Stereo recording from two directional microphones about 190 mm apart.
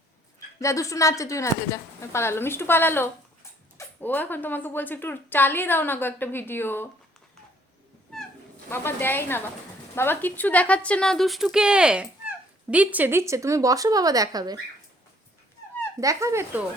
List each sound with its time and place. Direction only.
0.3 s a woman's voice: 15° left (ahead or behind)
8.7 s a woman's voice: 10° left (ahead or behind); by 14.6 s 20° right (ahead or behind)
16.0 s speech: 15° right (ahead or behind)